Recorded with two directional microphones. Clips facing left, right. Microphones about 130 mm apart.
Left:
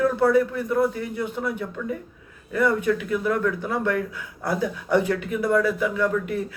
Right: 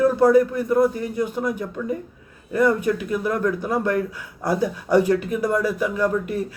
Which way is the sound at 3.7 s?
40° right (ahead or behind).